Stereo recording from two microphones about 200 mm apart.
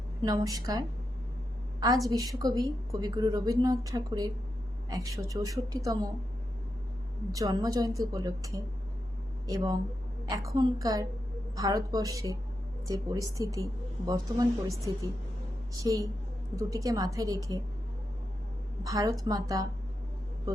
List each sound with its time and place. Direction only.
0.2 s a woman's voice: 20° right (ahead or behind)
2.0 s a woman's voice: 20° right (ahead or behind)
7.3 s a woman's voice: 20° right (ahead or behind)
18.8 s a woman's voice: 15° right (ahead or behind)